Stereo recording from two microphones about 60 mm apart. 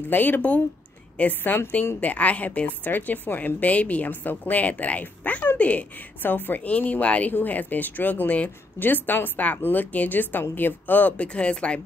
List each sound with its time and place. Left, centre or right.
0.1 s a woman's voice: left